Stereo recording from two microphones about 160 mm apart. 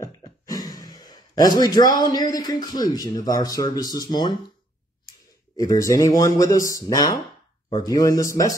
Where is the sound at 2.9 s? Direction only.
25° left (ahead or behind).